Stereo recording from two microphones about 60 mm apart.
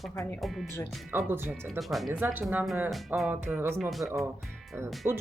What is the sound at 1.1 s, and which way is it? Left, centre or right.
Speech, right.